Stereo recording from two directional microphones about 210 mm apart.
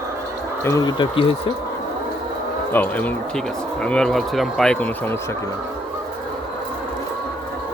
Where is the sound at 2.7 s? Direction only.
10° left (ahead or behind).